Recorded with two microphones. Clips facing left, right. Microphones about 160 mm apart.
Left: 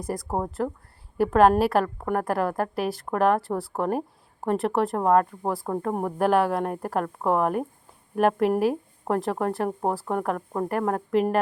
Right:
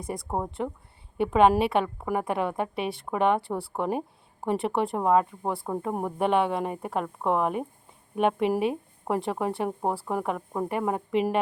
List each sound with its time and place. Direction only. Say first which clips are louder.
0.1 s a woman's voice: left 2 dB; centre (ahead or behind)